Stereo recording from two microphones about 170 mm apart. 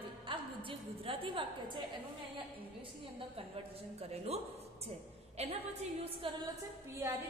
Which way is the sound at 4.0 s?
35° right (ahead or behind).